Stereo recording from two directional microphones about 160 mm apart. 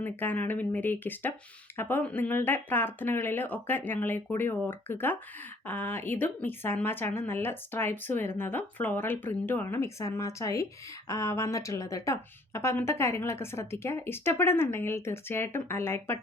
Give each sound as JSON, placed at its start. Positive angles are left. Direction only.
{"t": 0.0, "sound": "speech", "side_deg": 10}